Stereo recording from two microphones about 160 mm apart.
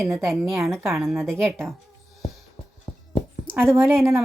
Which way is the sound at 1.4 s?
15° right (ahead or behind).